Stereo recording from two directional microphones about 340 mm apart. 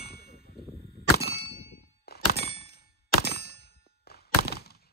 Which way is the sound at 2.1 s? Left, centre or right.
Left.